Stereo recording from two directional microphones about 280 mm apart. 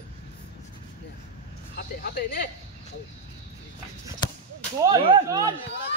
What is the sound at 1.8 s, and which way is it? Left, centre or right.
Speech, left.